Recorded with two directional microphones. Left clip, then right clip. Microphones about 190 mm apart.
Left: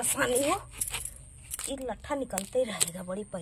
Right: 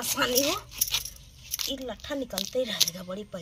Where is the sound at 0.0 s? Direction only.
5° left (ahead or behind).